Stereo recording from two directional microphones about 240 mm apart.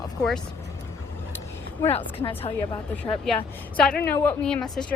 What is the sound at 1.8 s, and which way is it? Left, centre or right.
Speech, left.